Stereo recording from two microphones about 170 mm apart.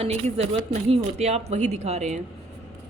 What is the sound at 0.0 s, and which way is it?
A woman's voice, 40° right (ahead or behind).